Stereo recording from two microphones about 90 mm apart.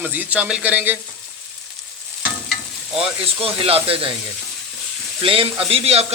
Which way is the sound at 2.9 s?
90° right.